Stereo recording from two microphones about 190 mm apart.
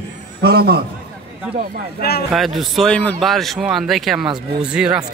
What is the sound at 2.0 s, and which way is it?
Speech, 55° left (ahead or behind).